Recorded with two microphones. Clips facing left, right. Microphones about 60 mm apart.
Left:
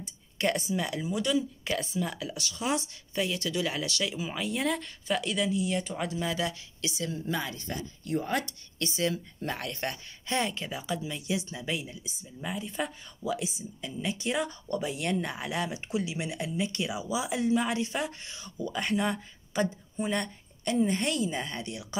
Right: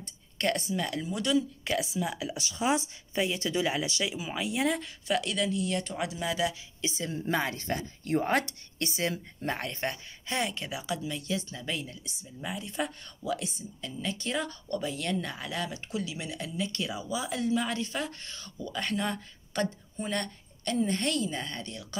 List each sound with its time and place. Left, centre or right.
0.0 s speech: centre
2.3 s speech: right
4.2 s speech: centre
7.1 s speech: right
8.7 s speech: right
9.8 s speech: centre
13.7 s speech: centre